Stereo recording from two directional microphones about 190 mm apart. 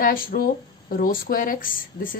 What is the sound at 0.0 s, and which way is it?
Speech, 50° left (ahead or behind).